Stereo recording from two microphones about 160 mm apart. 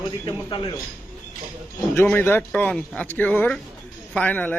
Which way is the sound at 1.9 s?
15° left (ahead or behind).